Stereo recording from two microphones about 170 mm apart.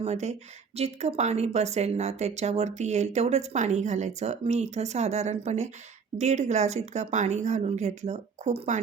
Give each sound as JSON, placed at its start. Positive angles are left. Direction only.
{"t": 0.0, "sound": "speech", "side_deg": -40}